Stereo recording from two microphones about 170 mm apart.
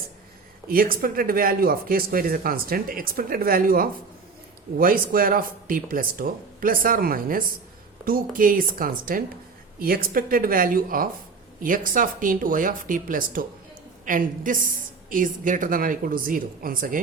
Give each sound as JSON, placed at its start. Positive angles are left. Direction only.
{"t": 0.7, "sound": "speech", "side_deg": -55}